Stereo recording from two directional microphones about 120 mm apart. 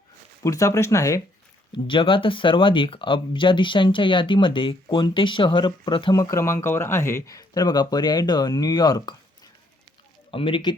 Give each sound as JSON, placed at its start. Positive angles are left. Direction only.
{"t": 0.4, "sound": "speech", "side_deg": 25}
{"t": 1.7, "sound": "speech", "side_deg": 45}
{"t": 10.3, "sound": "speech", "side_deg": 45}